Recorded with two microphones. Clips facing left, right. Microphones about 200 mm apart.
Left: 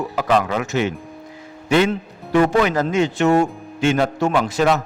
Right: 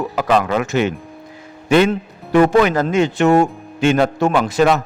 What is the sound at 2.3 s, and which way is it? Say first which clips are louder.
A man's voice: right 3 dB; 55° right (ahead or behind).